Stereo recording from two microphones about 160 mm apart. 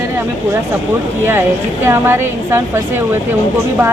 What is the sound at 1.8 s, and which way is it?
A woman's voice, 15° right (ahead or behind).